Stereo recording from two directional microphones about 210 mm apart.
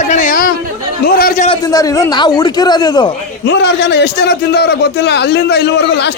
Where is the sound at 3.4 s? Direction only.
55° left (ahead or behind).